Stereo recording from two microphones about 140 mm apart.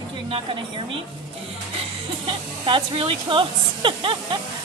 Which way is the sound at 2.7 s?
40° right (ahead or behind).